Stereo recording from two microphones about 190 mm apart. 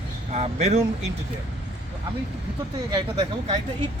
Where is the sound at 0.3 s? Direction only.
35° right (ahead or behind).